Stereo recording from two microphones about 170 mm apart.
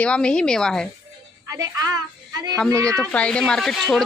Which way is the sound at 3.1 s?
5° left (ahead or behind).